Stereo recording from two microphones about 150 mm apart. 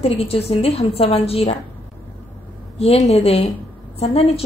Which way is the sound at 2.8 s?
45° left (ahead or behind).